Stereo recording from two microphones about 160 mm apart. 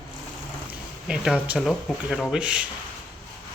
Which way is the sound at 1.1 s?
5° right (ahead or behind).